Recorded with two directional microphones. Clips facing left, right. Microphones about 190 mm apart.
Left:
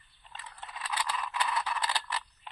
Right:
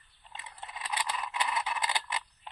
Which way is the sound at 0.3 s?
15° right (ahead or behind).